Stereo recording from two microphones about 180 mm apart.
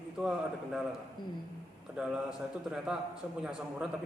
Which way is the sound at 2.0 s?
5° right (ahead or behind).